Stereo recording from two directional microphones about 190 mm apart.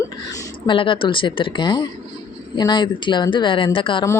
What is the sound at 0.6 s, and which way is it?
Speech, 25° left (ahead or behind).